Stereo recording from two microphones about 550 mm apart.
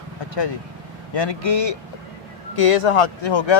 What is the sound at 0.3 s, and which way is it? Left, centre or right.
Speech, left.